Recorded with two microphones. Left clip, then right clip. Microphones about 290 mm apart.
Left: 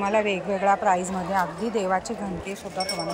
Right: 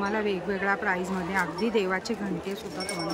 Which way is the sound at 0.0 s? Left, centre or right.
Centre.